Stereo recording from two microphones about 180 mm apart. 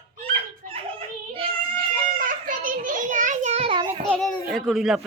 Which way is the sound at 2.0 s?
50° right (ahead or behind).